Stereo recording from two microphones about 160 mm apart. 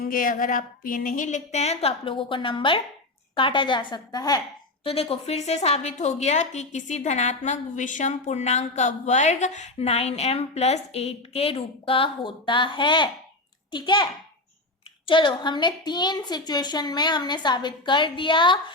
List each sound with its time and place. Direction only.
0.0 s a woman's voice: 60° left (ahead or behind); by 18.6 s 30° left (ahead or behind)